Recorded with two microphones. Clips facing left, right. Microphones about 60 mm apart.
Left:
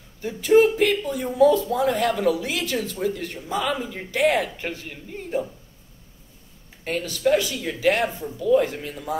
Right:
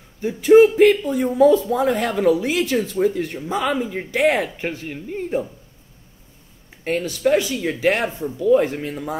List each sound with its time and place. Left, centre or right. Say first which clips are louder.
0.2 s speech: right 5 dB; right
6.8 s speech: right 3 dB; right